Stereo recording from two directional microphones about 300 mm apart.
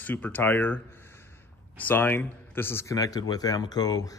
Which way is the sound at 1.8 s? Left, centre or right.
Centre.